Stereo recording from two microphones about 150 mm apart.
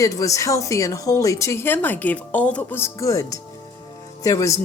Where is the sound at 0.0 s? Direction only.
20° left (ahead or behind).